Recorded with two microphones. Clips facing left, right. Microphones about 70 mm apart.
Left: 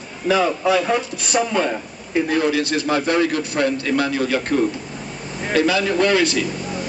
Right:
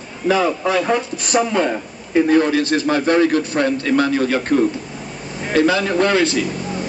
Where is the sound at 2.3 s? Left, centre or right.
Right.